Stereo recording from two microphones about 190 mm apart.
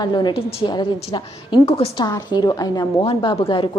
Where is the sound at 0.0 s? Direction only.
20° left (ahead or behind).